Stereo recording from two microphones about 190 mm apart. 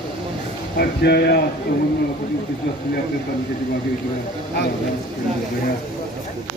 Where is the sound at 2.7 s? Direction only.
60° left (ahead or behind).